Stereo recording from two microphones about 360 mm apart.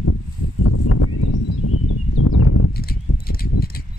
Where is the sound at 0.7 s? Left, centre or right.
Left.